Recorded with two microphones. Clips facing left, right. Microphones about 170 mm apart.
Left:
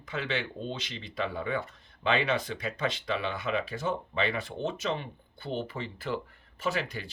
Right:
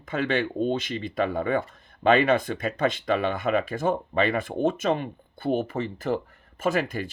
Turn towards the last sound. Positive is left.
turn(degrees=-50)  # may be behind; listen again after turning